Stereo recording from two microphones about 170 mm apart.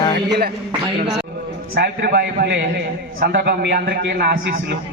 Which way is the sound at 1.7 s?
70° right (ahead or behind).